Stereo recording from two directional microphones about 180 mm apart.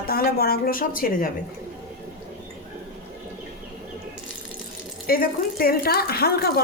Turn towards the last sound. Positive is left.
turn(degrees=60)  # may be behind; listen again after turning